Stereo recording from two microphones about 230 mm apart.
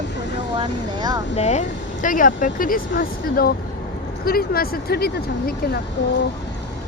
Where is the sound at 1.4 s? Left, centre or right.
Left.